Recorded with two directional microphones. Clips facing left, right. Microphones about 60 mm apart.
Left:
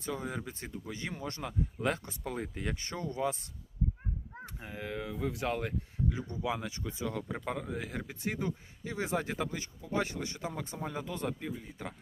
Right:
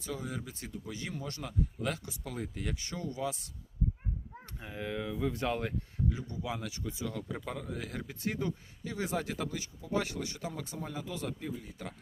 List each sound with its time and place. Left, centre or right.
0.0 s speech: left
4.6 s speech: centre
6.1 s speech: left